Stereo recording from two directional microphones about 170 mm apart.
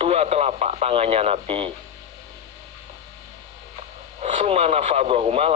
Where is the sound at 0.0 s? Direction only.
35° right (ahead or behind).